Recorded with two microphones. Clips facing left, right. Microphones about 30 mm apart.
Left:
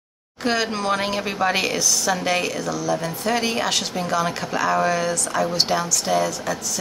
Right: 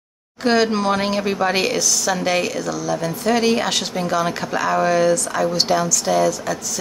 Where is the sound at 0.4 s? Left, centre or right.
Centre.